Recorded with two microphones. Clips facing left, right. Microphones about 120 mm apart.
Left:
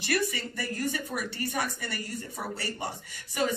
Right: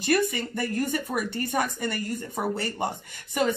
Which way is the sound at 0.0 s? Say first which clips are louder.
Right 5 dB; 50° right (ahead or behind).